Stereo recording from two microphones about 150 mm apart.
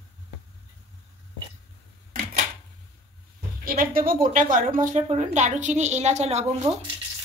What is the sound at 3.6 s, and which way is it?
A woman's voice, 70° right (ahead or behind).